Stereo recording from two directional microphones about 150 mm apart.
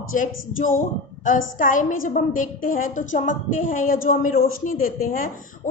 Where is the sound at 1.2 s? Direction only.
65° left (ahead or behind).